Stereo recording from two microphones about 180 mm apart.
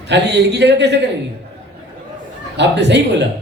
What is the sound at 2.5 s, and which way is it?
Speech, 75° right (ahead or behind).